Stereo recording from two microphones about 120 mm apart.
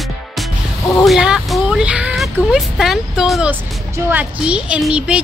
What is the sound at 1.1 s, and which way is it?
A woman's voice, 5° right (ahead or behind).